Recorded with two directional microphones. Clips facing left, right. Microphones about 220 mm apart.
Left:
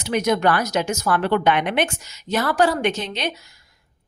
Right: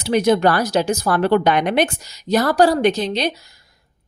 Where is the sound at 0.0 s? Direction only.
30° right (ahead or behind).